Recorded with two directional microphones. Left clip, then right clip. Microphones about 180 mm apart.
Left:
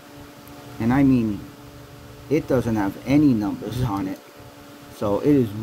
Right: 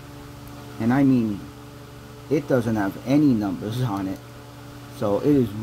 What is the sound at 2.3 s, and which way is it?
Speech, 35° left (ahead or behind).